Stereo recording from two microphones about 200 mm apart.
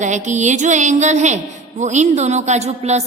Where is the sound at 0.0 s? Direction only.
35° right (ahead or behind).